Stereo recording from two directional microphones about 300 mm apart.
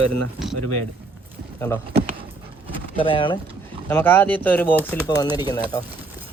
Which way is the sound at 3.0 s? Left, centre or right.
Centre.